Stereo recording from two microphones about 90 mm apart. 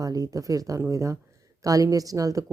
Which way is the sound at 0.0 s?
40° right (ahead or behind).